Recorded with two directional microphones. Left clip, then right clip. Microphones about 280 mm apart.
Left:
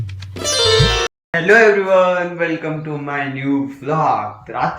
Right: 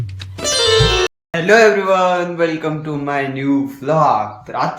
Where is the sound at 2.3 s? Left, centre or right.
Centre.